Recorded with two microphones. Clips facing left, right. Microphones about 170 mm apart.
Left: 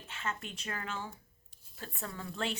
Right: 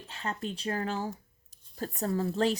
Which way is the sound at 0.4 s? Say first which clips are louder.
Right 9 dB; 35° right (ahead or behind).